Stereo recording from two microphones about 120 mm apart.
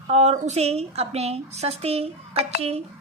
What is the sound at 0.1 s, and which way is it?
A woman's voice, 65° right (ahead or behind).